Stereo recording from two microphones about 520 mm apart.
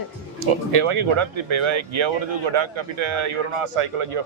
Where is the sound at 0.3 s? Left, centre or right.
Right.